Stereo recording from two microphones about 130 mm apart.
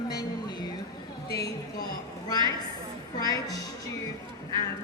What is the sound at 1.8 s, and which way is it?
A woman's voice, 30° left (ahead or behind).